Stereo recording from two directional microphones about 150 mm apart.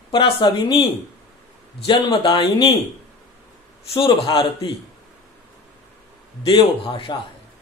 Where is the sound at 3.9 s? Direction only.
35° left (ahead or behind).